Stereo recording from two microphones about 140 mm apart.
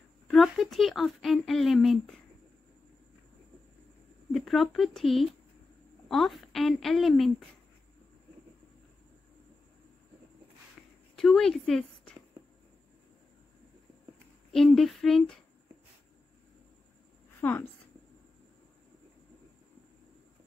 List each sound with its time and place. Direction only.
0.3 s speech: centre (ahead or behind)
4.3 s speech: centre (ahead or behind)
11.1 s a woman's voice: centre (ahead or behind)
14.5 s speech: centre (ahead or behind)
17.4 s a woman's voice: 15° left (ahead or behind)